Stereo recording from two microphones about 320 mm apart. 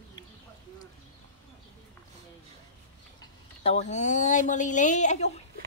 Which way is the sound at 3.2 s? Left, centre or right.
Centre.